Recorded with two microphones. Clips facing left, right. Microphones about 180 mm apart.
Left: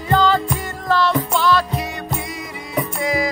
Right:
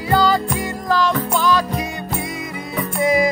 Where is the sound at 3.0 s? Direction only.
20° right (ahead or behind).